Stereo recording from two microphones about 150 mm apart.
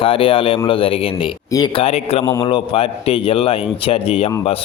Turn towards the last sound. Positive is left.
turn(degrees=40)  # may be behind; listen again after turning